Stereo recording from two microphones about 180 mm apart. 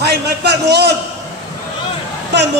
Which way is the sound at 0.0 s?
65° right (ahead or behind).